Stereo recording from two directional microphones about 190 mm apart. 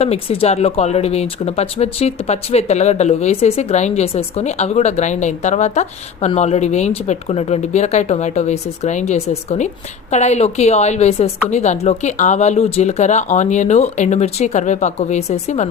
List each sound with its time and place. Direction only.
0.0 s speech: 35° left (ahead or behind)